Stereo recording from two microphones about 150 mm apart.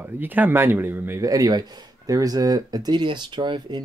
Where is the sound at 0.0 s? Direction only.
10° right (ahead or behind).